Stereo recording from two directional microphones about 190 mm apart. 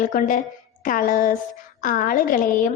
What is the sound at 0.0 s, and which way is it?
A woman's voice, 45° left (ahead or behind).